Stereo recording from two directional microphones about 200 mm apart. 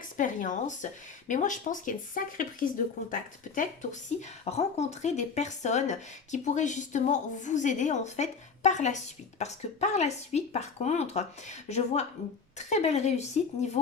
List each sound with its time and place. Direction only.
0.0 s speech: 40° left (ahead or behind)